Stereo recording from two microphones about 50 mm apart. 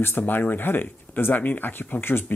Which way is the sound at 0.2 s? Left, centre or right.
Left.